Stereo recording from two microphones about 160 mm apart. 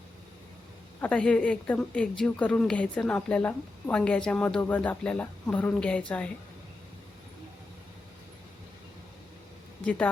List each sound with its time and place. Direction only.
1.0 s a woman's voice: 5° left (ahead or behind)